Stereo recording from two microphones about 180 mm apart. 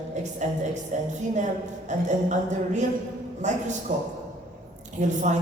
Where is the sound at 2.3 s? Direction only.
40° right (ahead or behind).